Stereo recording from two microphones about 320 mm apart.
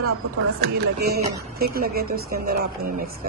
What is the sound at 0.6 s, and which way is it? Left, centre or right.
A woman's voice, right.